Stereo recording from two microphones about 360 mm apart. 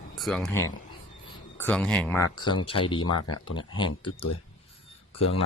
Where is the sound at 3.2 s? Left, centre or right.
Left.